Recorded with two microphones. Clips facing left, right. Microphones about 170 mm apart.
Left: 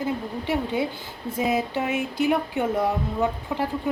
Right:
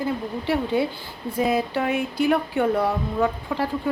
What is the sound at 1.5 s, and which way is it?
Speech, 20° left (ahead or behind).